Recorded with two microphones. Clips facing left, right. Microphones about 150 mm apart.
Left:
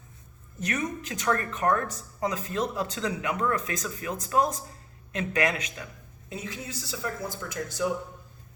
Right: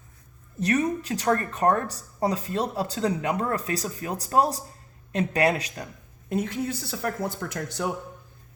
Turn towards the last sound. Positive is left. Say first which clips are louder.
# even
turn(degrees=-60)  # may be behind; listen again after turning